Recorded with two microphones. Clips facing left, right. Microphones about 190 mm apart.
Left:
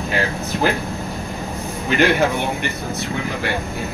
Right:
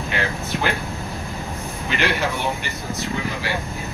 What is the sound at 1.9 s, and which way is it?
Speech, 50° left (ahead or behind).